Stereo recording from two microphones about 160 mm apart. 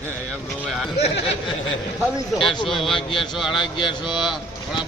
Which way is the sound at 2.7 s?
Centre (ahead or behind).